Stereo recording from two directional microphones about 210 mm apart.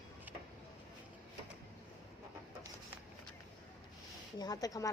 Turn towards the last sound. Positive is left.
turn(degrees=15)  # may be behind; listen again after turning